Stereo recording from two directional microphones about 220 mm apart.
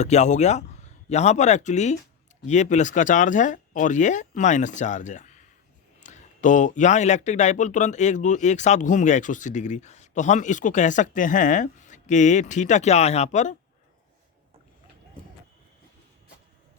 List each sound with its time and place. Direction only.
0.0 s speech: 30° left (ahead or behind)